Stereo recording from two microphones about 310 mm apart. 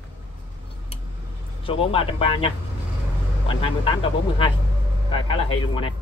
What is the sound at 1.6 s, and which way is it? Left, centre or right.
Speech, centre.